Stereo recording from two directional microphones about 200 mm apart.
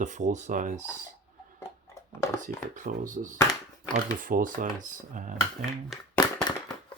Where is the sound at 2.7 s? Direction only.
40° right (ahead or behind).